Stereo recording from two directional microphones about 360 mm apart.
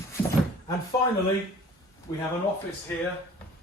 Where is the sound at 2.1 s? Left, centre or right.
Centre.